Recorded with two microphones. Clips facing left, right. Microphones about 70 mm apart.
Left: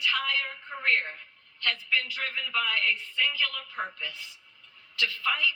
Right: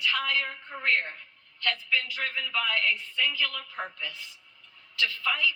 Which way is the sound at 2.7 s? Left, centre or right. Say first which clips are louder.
Right 1 dB; left.